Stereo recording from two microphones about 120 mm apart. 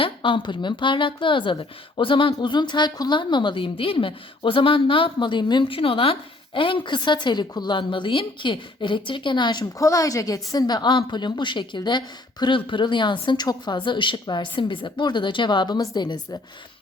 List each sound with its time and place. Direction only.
0.0 s a woman's voice: 45° left (ahead or behind)